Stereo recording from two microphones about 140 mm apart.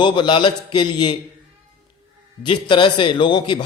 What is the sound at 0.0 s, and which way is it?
A man's voice, 35° left (ahead or behind).